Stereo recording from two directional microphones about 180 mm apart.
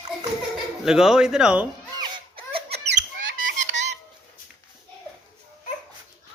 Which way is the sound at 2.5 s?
30° right (ahead or behind).